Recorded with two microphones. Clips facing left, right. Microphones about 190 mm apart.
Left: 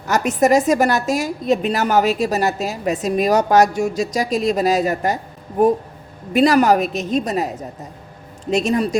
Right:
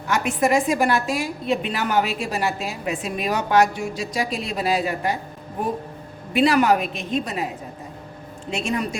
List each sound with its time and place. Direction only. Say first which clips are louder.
0.1 s a woman's voice: left 5 dB; 40° left (ahead or behind)
6.3 s a woman's voice: left 4 dB; 40° left (ahead or behind)